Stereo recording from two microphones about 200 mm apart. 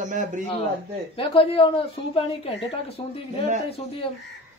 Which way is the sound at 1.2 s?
25° left (ahead or behind).